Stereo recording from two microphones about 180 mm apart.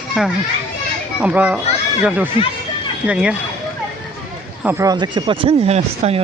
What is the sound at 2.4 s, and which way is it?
Speech, 30° left (ahead or behind).